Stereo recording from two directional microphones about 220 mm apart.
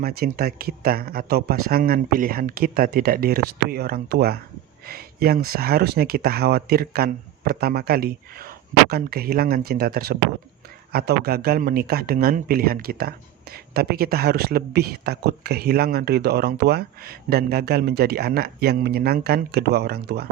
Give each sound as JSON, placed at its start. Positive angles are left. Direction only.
{"t": 0.0, "sound": "speech", "side_deg": -45}